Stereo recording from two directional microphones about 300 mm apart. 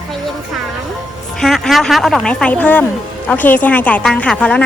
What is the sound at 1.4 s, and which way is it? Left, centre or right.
Speech, centre.